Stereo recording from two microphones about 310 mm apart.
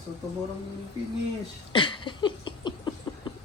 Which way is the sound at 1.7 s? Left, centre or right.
Centre.